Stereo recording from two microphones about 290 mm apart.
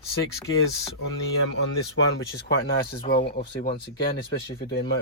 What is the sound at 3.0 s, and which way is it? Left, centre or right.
Speech, centre.